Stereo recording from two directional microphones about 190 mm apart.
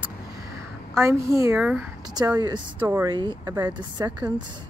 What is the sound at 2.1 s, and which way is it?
Speech, 20° right (ahead or behind).